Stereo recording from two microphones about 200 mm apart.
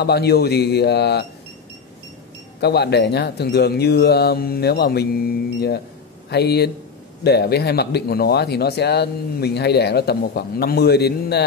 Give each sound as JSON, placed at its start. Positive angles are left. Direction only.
{"t": 0.0, "sound": "speech", "side_deg": 55}
{"t": 2.6, "sound": "speech", "side_deg": 55}